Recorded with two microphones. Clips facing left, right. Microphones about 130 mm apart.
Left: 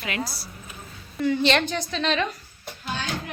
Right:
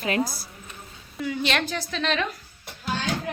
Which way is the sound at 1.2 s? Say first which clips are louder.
Left 5 dB; 5° right (ahead or behind).